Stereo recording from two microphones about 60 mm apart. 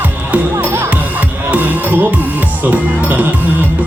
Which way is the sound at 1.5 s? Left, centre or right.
Right.